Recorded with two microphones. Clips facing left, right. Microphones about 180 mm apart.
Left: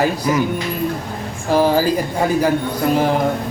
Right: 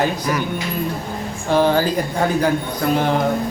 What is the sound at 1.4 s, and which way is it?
Speech, 5° left (ahead or behind).